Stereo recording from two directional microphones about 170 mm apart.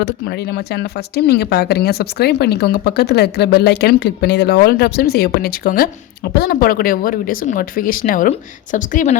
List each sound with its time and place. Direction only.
0.0 s a woman's voice: 75° left (ahead or behind); by 9.1 s 50° left (ahead or behind)